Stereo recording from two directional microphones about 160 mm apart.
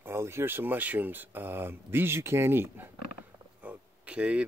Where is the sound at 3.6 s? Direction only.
10° right (ahead or behind).